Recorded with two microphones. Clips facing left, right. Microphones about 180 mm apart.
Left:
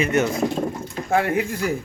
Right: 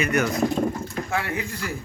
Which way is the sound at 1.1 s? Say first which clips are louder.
Left 10 dB; 50° left (ahead or behind).